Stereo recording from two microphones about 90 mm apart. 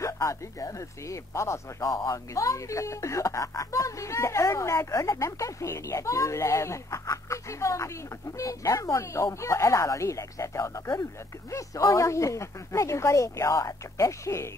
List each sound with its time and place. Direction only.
0.0 s speech: 35° left (ahead or behind)